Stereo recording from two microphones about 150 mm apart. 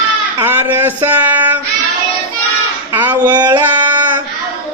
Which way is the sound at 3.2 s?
30° right (ahead or behind).